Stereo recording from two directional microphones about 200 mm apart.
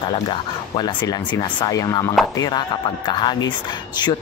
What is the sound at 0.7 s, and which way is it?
Speech, 20° left (ahead or behind).